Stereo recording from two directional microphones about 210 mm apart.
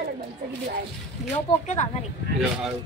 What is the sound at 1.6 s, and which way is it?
Speech, 35° left (ahead or behind).